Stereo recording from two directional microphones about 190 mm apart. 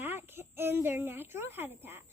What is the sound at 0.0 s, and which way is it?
A child's voice, 10° right (ahead or behind).